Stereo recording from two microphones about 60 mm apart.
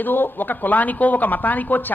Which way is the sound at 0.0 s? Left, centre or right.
Left.